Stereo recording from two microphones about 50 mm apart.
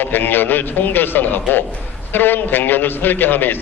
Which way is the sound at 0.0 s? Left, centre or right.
Left.